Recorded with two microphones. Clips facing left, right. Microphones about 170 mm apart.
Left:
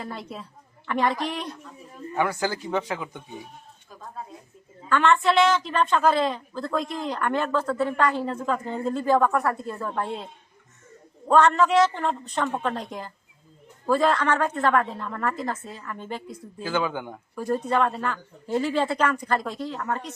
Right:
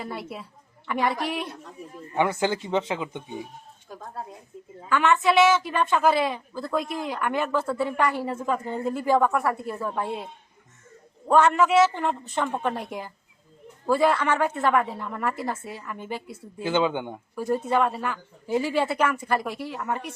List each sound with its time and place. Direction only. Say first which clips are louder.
0.0 s a woman's voice: right 1 dB; 5° right (ahead or behind)
2.1 s speech: right 2 dB; 20° right (ahead or behind)
4.9 s a woman's voice: left 1 dB; 5° right (ahead or behind)
11.3 s a woman's voice: even; 10° right (ahead or behind)
16.6 s speech: right 3 dB; 20° right (ahead or behind)
17.3 s a woman's voice: even; 5° right (ahead or behind)